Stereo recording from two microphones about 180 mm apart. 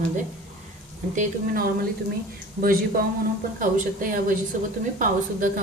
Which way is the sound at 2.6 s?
55° right (ahead or behind).